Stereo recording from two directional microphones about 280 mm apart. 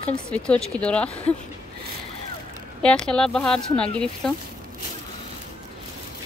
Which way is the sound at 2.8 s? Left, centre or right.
Centre.